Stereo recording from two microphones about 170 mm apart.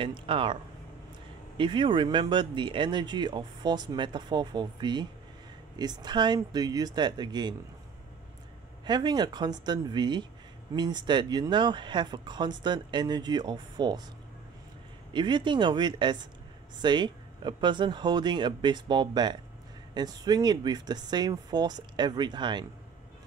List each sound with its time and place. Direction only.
0.0 s speech: 30° right (ahead or behind)
1.6 s speech: 30° right (ahead or behind)
8.8 s speech: 25° right (ahead or behind)
15.1 s speech: 25° right (ahead or behind)